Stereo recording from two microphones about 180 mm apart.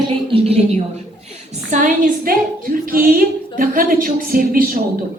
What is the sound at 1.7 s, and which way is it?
A woman's voice, 45° right (ahead or behind).